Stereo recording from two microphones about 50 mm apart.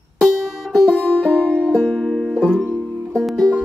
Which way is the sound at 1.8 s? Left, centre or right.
Centre.